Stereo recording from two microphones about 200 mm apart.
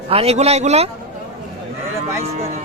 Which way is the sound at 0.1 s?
30° right (ahead or behind).